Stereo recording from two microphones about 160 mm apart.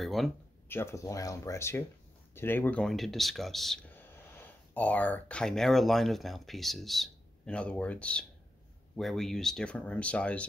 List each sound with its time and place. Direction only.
0.0 s speech: centre (ahead or behind)
0.7 s speech: 15° left (ahead or behind)